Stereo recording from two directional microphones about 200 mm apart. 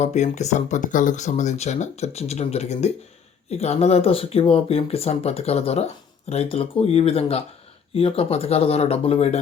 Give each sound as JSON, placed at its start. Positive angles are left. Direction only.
{"t": 0.0, "sound": "speech", "side_deg": 35}